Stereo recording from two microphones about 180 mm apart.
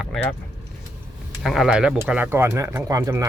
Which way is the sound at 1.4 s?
Centre (ahead or behind).